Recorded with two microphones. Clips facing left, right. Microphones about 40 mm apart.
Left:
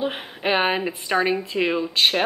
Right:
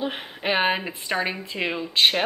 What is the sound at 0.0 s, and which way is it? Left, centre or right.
A woman's voice, centre.